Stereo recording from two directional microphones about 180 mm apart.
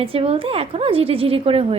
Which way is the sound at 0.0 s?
30° right (ahead or behind).